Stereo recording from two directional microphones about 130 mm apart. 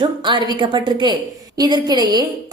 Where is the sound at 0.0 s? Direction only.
35° right (ahead or behind).